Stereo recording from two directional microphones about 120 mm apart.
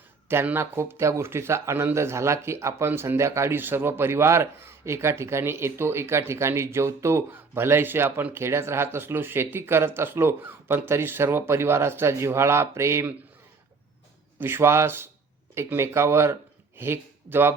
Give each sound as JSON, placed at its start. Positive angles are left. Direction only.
{"t": 0.3, "sound": "speech", "side_deg": -20}
{"t": 14.3, "sound": "speech", "side_deg": -20}